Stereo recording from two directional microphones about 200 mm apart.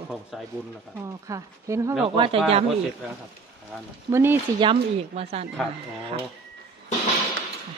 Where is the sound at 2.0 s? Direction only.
25° right (ahead or behind).